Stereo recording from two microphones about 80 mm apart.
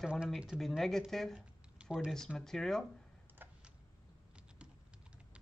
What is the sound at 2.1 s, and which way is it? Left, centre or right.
Speech, centre.